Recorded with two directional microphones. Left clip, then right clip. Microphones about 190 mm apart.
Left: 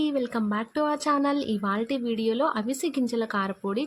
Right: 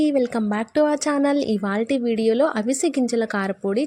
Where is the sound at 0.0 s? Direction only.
20° right (ahead or behind).